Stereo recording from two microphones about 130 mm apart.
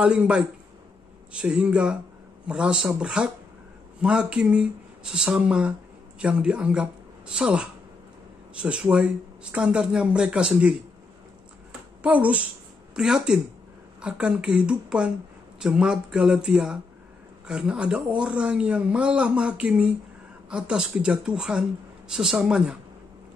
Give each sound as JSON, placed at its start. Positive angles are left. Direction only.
{"t": 0.0, "sound": "speech", "side_deg": -10}
{"t": 12.0, "sound": "speech", "side_deg": -10}